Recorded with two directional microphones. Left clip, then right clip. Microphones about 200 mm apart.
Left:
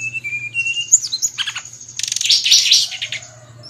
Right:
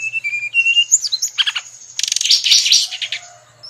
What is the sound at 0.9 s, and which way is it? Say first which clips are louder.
Bird: even; 20° right (ahead or behind).